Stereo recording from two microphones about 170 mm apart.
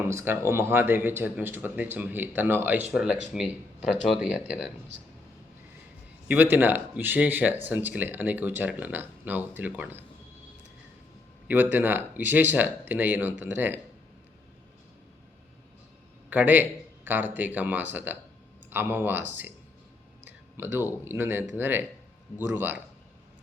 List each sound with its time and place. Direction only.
0.0 s speech: 15° right (ahead or behind)
4.9 s speech: 90° right
6.2 s speech: 10° right (ahead or behind)
11.4 s speech: 10° right (ahead or behind)
16.3 s speech: 10° right (ahead or behind)
20.6 s speech: 15° right (ahead or behind)